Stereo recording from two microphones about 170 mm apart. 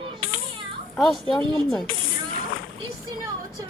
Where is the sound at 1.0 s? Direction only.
Centre (ahead or behind).